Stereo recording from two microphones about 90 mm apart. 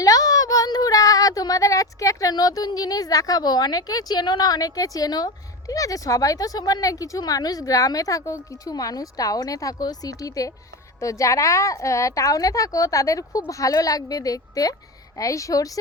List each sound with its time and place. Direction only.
0.0 s a woman's voice: 45° left (ahead or behind)